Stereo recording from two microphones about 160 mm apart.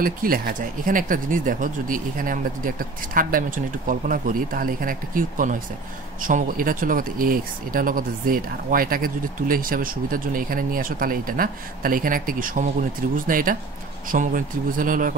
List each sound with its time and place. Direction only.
0.0 s speech: 60° right (ahead or behind)